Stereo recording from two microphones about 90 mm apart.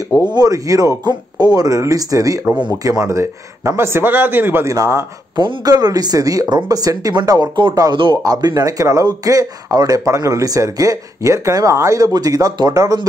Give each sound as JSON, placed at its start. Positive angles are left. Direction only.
{"t": 0.3, "sound": "a man's voice", "side_deg": -45}
{"t": 4.6, "sound": "speech", "side_deg": -35}
{"t": 5.3, "sound": "speech", "side_deg": -50}